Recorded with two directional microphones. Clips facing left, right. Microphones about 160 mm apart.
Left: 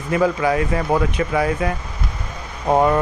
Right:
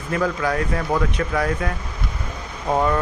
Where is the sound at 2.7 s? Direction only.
30° left (ahead or behind).